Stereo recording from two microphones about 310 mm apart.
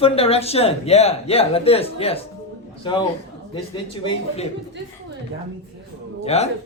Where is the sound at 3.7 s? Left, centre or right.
Centre.